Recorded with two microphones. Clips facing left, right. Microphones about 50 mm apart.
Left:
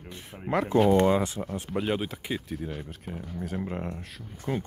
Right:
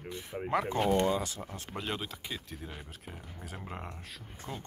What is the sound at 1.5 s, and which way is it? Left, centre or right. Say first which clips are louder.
Speech: left 9 dB; centre.